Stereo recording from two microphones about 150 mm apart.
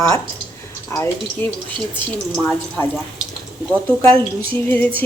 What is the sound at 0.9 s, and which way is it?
Speech, 15° left (ahead or behind).